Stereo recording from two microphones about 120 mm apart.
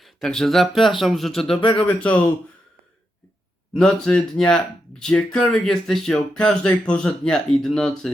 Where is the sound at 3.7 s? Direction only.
5° left (ahead or behind).